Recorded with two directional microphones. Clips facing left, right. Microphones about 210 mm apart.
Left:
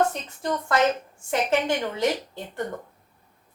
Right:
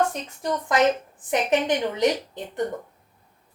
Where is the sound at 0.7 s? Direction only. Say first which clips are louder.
Right 2 dB; 15° right (ahead or behind).